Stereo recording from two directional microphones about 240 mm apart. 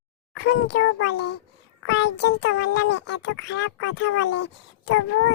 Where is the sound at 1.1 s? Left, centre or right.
Left.